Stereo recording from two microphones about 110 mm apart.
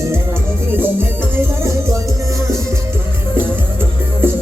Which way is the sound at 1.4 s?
25° right (ahead or behind).